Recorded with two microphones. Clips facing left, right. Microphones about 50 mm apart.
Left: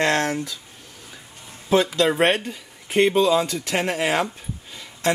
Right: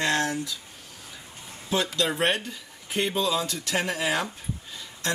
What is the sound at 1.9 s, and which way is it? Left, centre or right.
Speech, left.